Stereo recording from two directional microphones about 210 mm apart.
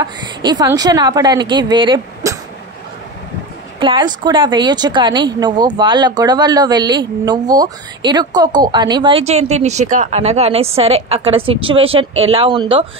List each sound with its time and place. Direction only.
0.0 s a woman's voice: 20° right (ahead or behind)
3.8 s a woman's voice: 20° right (ahead or behind)